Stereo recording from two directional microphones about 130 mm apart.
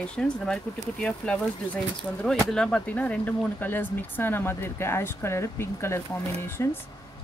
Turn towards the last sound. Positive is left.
turn(degrees=20)  # may be behind; listen again after turning